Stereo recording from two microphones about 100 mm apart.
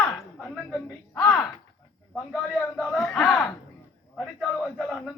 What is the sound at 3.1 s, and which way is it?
Speech, 20° left (ahead or behind).